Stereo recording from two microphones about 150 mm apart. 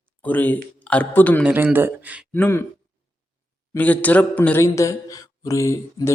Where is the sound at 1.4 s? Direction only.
10° right (ahead or behind).